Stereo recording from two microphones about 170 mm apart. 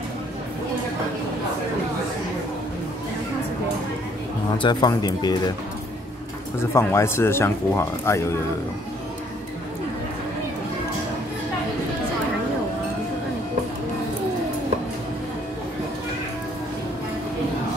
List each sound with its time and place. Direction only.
4.6 s speech: 25° left (ahead or behind)
6.6 s speech: 15° left (ahead or behind)